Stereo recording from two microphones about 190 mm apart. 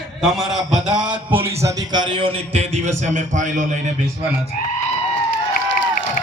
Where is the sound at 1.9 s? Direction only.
25° right (ahead or behind).